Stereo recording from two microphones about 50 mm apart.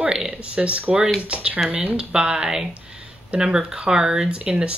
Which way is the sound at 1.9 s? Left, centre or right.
Centre.